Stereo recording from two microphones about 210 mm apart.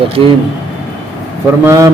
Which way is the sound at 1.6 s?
15° right (ahead or behind).